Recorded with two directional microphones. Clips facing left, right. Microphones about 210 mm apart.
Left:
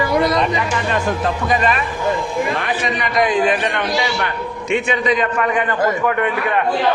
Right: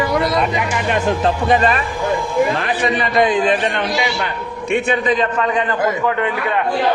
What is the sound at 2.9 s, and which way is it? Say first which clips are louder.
A man's voice: right 1 dB; 25° right (ahead or behind).